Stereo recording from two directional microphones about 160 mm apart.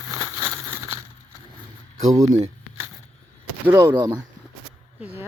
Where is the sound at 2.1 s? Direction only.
20° right (ahead or behind).